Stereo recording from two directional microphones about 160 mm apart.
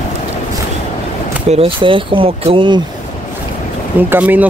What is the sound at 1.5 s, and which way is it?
Speech, 35° right (ahead or behind).